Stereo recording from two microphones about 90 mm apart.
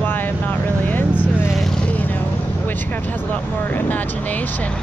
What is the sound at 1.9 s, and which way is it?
Vehicle, 20° left (ahead or behind).